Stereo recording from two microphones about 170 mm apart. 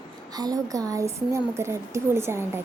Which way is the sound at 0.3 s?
20° right (ahead or behind).